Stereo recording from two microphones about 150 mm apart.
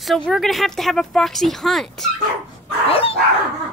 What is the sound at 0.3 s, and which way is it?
Speech, centre (ahead or behind).